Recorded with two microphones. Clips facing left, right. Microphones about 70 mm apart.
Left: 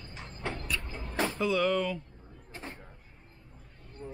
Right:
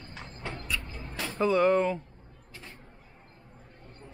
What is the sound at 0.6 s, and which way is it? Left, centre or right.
Vehicle, left.